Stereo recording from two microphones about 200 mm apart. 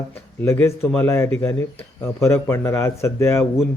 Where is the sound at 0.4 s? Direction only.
10° left (ahead or behind).